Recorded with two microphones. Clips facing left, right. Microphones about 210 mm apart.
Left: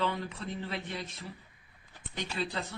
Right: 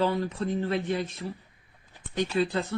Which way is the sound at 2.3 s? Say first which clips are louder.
Right 9 dB; 50° right (ahead or behind).